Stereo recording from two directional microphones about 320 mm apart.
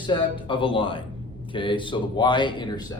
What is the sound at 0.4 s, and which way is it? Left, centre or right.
Speech, centre.